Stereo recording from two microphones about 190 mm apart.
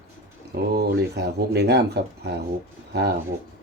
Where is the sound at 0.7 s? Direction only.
55° right (ahead or behind).